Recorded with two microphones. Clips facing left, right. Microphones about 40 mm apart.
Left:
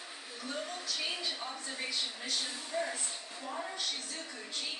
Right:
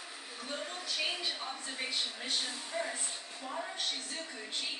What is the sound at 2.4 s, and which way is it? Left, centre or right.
A woman's voice, centre.